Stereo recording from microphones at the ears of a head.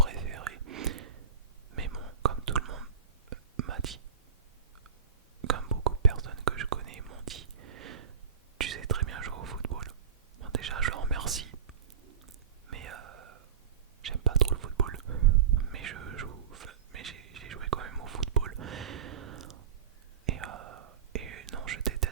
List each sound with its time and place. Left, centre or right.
0.0 s whispering: right
5.4 s whispering: right